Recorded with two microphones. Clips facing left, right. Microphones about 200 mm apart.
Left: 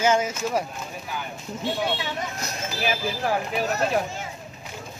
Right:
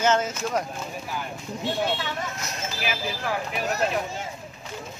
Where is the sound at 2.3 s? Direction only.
35° left (ahead or behind).